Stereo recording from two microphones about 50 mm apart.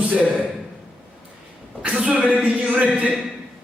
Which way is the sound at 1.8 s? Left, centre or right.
Centre.